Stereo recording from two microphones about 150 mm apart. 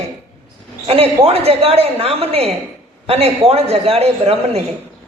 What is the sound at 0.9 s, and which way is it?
A woman's voice, 40° right (ahead or behind).